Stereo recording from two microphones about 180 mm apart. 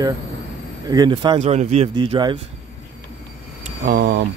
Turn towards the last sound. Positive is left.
turn(degrees=-55)  # may be behind; listen again after turning